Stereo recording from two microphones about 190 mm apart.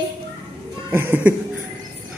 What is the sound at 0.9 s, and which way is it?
Speech, 10° right (ahead or behind).